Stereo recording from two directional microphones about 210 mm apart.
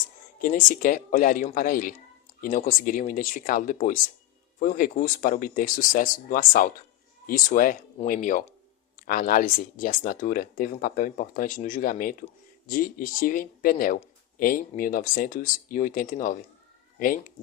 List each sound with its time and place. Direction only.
0.3 s speech: 40° left (ahead or behind)